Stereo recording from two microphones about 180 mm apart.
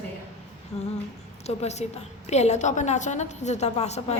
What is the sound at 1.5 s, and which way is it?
A woman's voice, 35° left (ahead or behind).